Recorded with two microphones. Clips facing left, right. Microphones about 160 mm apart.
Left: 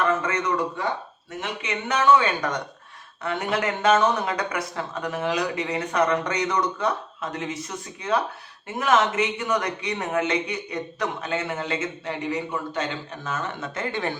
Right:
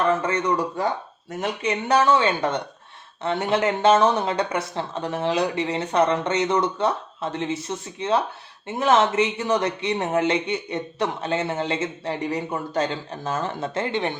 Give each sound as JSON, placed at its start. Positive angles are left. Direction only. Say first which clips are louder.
{"t": 0.1, "sound": "speech", "louder": "right 2 dB", "side_deg": -30}